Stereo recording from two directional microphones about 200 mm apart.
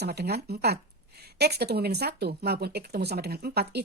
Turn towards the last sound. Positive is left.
turn(degrees=-55)  # may be behind; listen again after turning